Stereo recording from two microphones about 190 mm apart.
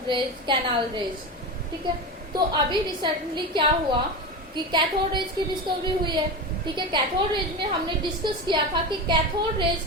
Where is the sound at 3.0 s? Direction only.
25° right (ahead or behind).